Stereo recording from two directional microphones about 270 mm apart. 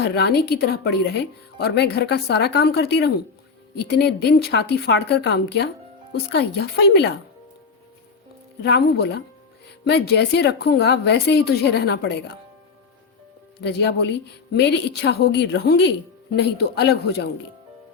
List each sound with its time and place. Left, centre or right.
0.2 s a woman's voice: left
8.6 s a woman's voice: left
13.6 s a woman's voice: left